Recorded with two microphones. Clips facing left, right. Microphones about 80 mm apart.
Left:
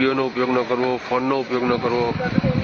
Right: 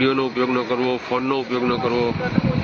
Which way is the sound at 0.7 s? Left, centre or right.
Centre.